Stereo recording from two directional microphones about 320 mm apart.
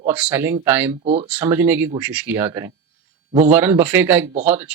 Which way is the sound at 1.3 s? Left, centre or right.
Centre.